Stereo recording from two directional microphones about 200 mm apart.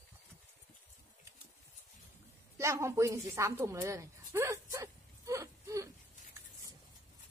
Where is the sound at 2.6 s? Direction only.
15° right (ahead or behind).